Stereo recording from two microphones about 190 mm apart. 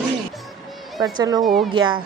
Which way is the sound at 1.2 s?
20° right (ahead or behind).